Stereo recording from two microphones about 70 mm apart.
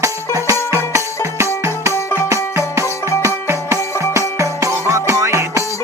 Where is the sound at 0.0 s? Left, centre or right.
Right.